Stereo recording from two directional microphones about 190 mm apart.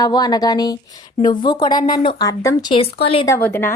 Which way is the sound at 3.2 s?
15° left (ahead or behind).